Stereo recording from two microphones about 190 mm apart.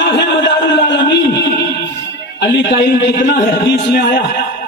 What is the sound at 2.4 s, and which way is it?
Speech, 65° left (ahead or behind).